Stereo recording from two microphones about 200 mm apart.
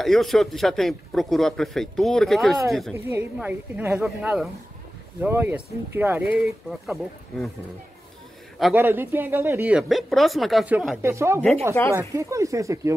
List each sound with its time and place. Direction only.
0.0 s speech: centre (ahead or behind)
2.9 s speech: 10° right (ahead or behind)
8.7 s speech: 10° right (ahead or behind)